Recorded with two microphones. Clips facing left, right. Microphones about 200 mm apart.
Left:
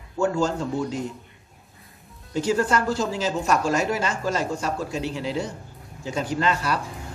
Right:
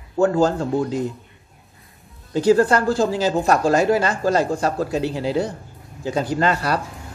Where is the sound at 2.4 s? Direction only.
35° right (ahead or behind).